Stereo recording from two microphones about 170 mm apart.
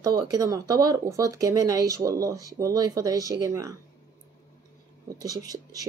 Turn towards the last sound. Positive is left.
turn(degrees=-20)  # may be behind; listen again after turning